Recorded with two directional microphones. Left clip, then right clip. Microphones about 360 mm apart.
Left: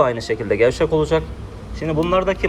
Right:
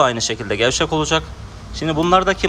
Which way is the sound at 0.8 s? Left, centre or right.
Right.